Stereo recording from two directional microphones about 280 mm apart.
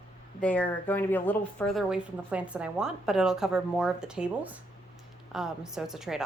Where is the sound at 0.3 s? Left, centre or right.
Centre.